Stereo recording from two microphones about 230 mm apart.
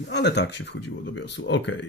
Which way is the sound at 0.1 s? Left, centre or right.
Left.